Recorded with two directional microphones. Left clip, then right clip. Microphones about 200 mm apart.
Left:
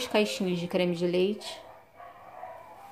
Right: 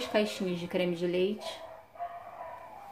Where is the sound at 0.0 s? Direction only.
30° left (ahead or behind).